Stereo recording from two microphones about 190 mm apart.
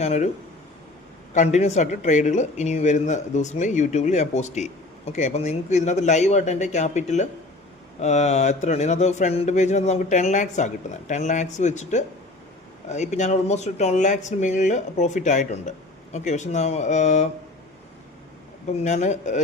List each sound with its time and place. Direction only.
0.0 s speech: 35° left (ahead or behind)
1.3 s speech: 40° left (ahead or behind)
18.8 s speech: 35° left (ahead or behind)